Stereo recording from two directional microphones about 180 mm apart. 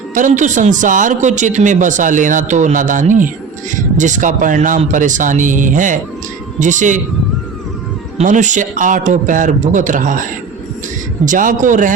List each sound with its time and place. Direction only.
0.1 s speech: 45° right (ahead or behind)
8.2 s speech: 45° right (ahead or behind)
11.3 s speech: 45° right (ahead or behind)